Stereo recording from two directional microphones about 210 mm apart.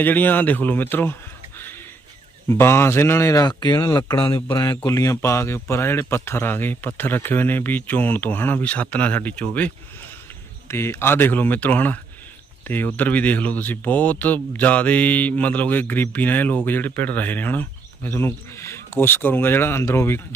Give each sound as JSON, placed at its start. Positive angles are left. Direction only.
{"t": 0.0, "sound": "speech", "side_deg": 10}
{"t": 1.5, "sound": "a sound", "side_deg": 10}
{"t": 2.5, "sound": "speech", "side_deg": 10}